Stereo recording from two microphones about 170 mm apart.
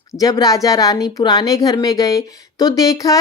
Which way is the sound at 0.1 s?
20° left (ahead or behind).